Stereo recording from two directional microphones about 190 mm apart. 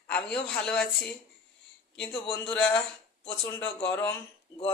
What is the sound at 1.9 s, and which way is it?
A woman's voice, 5° left (ahead or behind).